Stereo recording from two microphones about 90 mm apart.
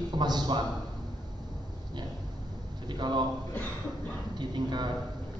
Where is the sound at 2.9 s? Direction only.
55° right (ahead or behind).